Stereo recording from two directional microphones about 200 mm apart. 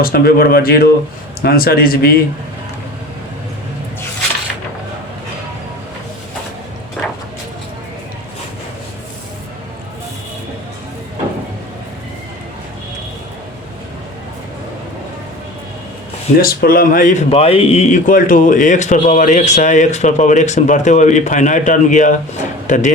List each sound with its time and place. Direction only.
0.0 s speech: 50° left (ahead or behind)
7.0 s vehicle: 5° left (ahead or behind)
16.4 s speech: 50° left (ahead or behind)